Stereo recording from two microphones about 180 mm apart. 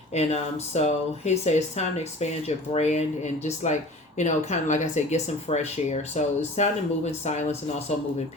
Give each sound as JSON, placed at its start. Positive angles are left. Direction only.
{"t": 0.1, "sound": "speech", "side_deg": 35}